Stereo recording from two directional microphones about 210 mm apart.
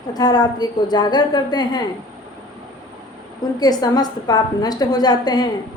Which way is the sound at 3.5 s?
20° left (ahead or behind).